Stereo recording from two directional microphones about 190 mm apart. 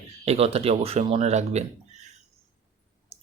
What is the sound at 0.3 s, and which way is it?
Speech, 30° right (ahead or behind).